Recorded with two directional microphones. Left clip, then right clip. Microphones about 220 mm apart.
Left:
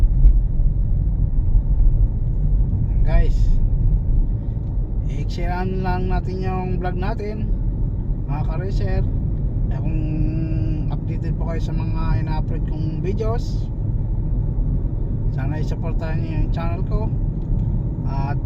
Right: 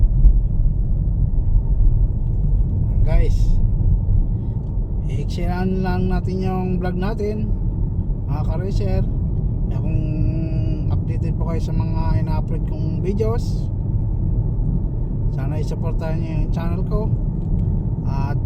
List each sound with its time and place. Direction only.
5.4 s speech: 20° right (ahead or behind)
10.0 s music: 15° right (ahead or behind)
11.2 s speech: 20° right (ahead or behind)
13.1 s music: 20° right (ahead or behind)
15.4 s speech: 15° right (ahead or behind)
18.1 s speech: 20° right (ahead or behind)